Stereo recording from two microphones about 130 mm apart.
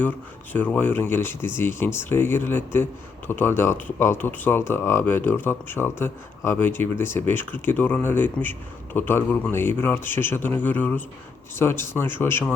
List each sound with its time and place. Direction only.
0.5 s a man's voice: 15° left (ahead or behind)